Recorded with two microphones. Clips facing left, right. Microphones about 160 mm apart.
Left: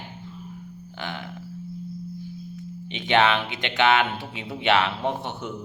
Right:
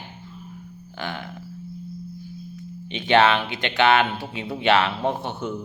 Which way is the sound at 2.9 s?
20° left (ahead or behind).